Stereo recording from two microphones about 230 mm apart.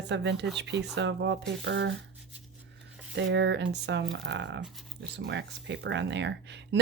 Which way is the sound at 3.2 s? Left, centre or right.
Right.